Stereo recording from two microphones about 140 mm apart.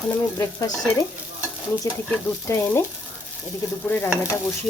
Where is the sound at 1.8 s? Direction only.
20° left (ahead or behind).